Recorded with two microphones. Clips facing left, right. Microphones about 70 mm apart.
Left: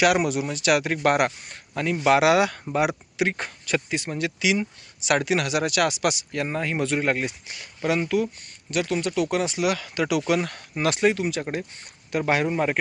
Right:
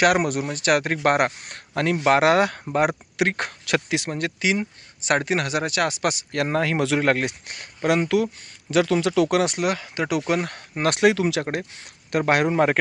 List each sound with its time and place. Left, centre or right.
0.0 s speech: right
1.5 s speech: right
2.0 s speech: right
2.7 s speech: right
4.1 s speech: right
6.3 s speech: right
9.7 s speech: right
10.9 s speech: right
12.1 s speech: right